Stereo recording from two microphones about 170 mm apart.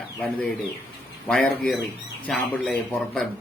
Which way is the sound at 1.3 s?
5° left (ahead or behind).